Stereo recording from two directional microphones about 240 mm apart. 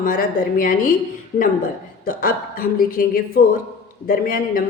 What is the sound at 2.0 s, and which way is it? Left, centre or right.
A woman's voice, left.